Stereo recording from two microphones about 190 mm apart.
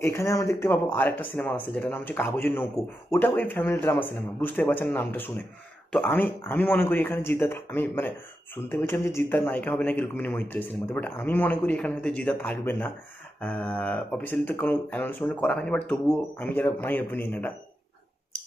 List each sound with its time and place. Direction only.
0.0 s speech: 15° left (ahead or behind)